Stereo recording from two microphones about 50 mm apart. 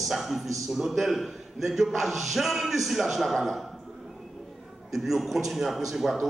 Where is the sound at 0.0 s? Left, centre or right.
Centre.